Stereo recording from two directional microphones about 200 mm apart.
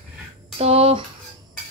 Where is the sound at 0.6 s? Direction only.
30° right (ahead or behind).